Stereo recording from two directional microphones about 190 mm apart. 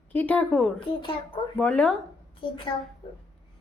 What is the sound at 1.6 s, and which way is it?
Speech, 5° left (ahead or behind).